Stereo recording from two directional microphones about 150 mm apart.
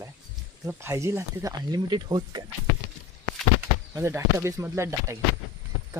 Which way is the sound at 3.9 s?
20° right (ahead or behind).